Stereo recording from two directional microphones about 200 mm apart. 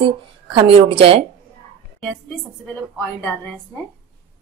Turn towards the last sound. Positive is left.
turn(degrees=10)  # may be behind; listen again after turning